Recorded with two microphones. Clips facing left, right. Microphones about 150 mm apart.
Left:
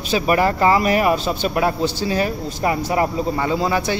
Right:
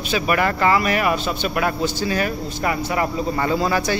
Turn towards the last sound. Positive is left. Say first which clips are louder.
# even
turn(degrees=20)  # may be behind; listen again after turning